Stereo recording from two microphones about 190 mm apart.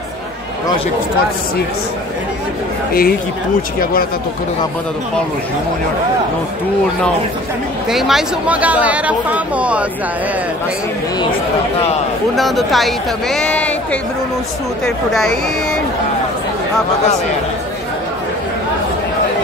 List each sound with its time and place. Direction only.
2.9 s speech: 50° left (ahead or behind)
7.9 s speech: centre (ahead or behind)
12.4 s speech: centre (ahead or behind)
15.1 s speech: centre (ahead or behind)